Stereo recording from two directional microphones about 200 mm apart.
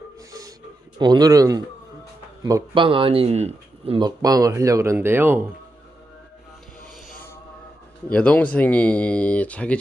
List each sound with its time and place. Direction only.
0.9 s a man's voice: 20° right (ahead or behind)
8.1 s speech: 5° left (ahead or behind)